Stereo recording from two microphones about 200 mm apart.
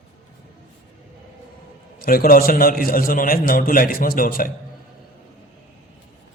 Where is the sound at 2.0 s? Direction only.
45° left (ahead or behind).